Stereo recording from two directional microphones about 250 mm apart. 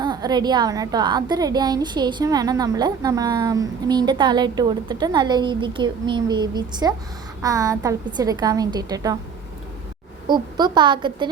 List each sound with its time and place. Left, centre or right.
0.0 s a woman's voice: centre
10.2 s a woman's voice: centre